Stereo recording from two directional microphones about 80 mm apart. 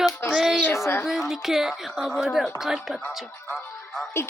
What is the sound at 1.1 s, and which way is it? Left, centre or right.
A woman's voice, centre.